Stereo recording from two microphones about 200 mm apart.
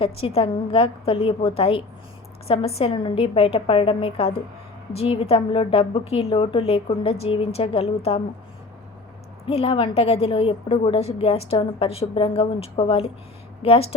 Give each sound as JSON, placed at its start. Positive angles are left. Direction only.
{"t": 0.0, "sound": "a woman's voice", "side_deg": 30}
{"t": 9.5, "sound": "a woman's voice", "side_deg": 30}